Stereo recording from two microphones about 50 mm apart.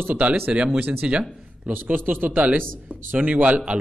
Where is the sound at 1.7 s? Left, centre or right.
Right.